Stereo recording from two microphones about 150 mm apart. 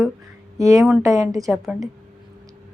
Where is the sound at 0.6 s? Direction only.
20° right (ahead or behind).